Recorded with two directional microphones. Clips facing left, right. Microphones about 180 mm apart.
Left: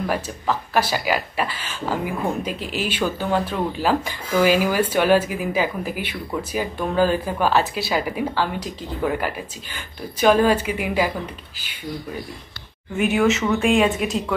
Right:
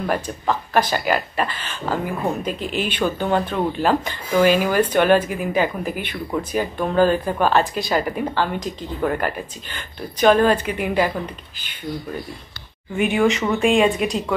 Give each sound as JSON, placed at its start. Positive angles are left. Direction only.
{"t": 0.0, "sound": "speech", "side_deg": 5}
{"t": 12.9, "sound": "speech", "side_deg": 0}